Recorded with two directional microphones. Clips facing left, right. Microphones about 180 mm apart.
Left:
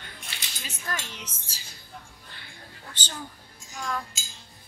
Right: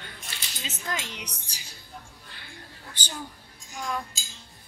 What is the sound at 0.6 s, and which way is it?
A woman's voice, 20° right (ahead or behind).